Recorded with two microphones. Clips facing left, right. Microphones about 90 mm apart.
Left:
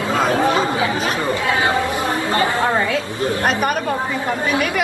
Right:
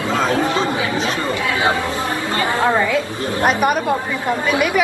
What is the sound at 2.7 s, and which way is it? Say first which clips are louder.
Speech: right 2 dB; 25° left (ahead or behind).